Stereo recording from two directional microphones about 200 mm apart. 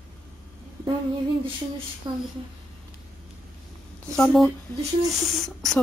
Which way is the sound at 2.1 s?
20° right (ahead or behind).